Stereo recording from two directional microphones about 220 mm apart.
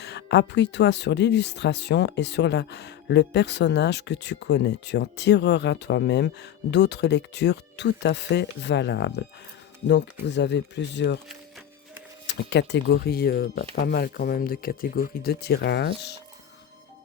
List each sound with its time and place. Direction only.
0.0 s speech: 50° left (ahead or behind)
12.4 s speech: 50° left (ahead or behind)